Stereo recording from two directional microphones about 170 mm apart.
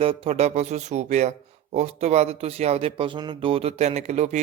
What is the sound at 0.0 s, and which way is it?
A man's voice, 35° right (ahead or behind).